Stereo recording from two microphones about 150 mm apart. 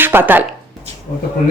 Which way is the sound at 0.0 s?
15° right (ahead or behind).